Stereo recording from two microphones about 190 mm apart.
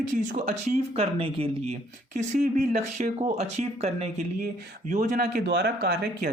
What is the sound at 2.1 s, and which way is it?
Speech, 40° right (ahead or behind).